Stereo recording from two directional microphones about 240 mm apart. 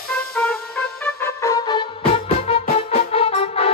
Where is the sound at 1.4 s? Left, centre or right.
Centre.